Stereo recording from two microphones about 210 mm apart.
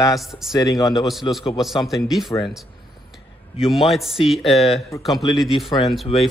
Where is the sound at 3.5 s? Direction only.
Centre (ahead or behind).